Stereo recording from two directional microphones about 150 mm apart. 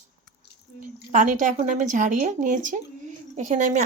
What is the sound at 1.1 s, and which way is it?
A woman's voice, 55° right (ahead or behind).